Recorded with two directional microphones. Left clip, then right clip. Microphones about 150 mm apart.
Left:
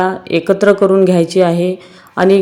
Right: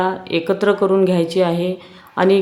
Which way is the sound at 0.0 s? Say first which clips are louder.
Left 4 dB; 30° left (ahead or behind).